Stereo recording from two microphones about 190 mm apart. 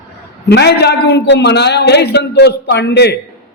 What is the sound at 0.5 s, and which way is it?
A man's voice, 60° left (ahead or behind).